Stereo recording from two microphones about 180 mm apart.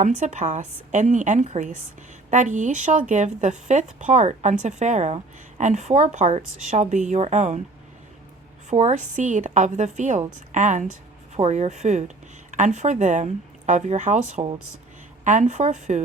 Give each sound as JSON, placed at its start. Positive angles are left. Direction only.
{"t": 0.0, "sound": "a woman's voice", "side_deg": -40}
{"t": 8.7, "sound": "a woman's voice", "side_deg": -40}